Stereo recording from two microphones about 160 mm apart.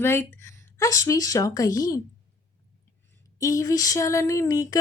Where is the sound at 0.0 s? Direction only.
15° left (ahead or behind).